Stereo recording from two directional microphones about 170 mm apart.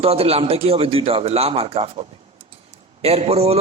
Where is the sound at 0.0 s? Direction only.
35° right (ahead or behind).